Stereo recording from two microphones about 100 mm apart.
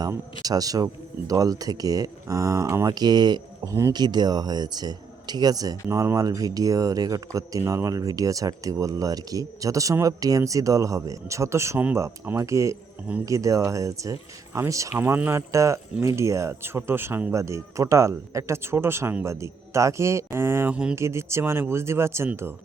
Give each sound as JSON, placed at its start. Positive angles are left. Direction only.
{"t": 0.4, "sound": "speech", "side_deg": -40}